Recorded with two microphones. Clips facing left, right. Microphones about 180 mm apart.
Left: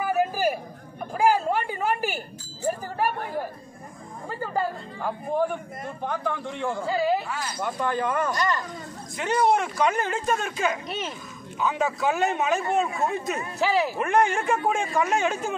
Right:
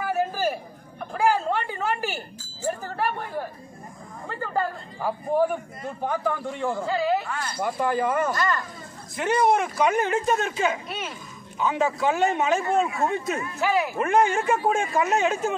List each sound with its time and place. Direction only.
0.0 s a sound: 15° left (ahead or behind)
1.1 s chink: 10° left (ahead or behind)
4.3 s chatter: 10° left (ahead or behind)
5.0 s speech: 10° right (ahead or behind)
6.9 s a woman's voice: 10° left (ahead or behind)
7.5 s speech: 10° right (ahead or behind)
13.4 s speech: 35° left (ahead or behind)
13.9 s speech: centre (ahead or behind)